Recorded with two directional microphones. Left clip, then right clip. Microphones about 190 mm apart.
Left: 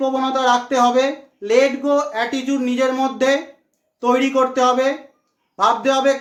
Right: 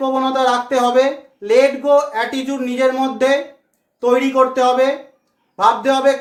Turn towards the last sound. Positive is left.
turn(degrees=15)  # may be behind; listen again after turning